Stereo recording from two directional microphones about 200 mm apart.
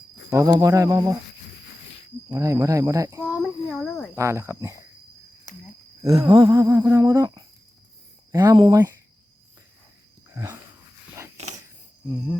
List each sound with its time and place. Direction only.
0.3 s humming: 15° right (ahead or behind)
2.3 s humming: 15° right (ahead or behind)
3.3 s child singing: centre (ahead or behind)
4.1 s humming: 15° right (ahead or behind)
6.0 s humming: 15° right (ahead or behind)
10.3 s dog: 15° right (ahead or behind)
11.3 s a sound: 35° right (ahead or behind)